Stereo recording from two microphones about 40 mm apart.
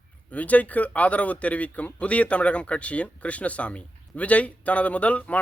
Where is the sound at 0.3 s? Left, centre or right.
Left.